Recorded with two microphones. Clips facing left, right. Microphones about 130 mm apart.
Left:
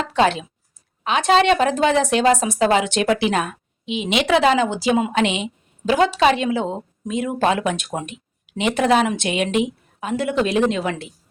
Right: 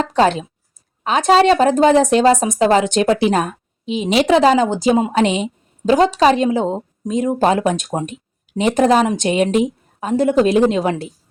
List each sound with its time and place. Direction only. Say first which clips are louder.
0.0 s speech: right 3 dB; 40° right (ahead or behind)